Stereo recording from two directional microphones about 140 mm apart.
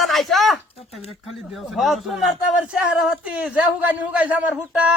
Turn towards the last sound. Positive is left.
turn(degrees=-10)  # may be behind; listen again after turning